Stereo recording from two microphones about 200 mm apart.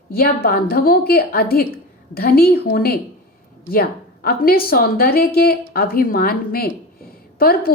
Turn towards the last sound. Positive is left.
turn(degrees=50)  # may be behind; listen again after turning